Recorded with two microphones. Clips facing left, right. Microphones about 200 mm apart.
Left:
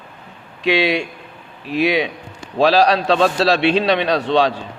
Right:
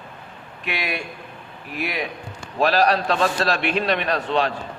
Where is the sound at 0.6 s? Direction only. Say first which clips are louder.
Left 11 dB; 80° left.